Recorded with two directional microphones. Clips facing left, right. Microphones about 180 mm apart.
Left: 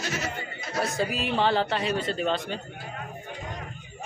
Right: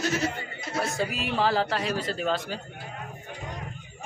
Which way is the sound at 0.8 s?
Centre (ahead or behind).